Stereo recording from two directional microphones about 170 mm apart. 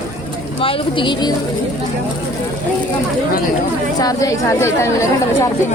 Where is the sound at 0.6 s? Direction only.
30° left (ahead or behind).